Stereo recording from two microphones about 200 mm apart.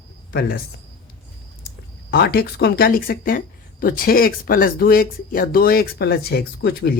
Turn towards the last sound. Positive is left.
turn(degrees=55)  # may be behind; listen again after turning